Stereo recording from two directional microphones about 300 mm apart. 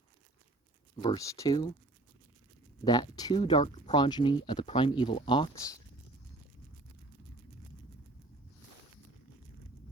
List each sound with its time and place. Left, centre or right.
1.0 s speech: centre
2.8 s speech: centre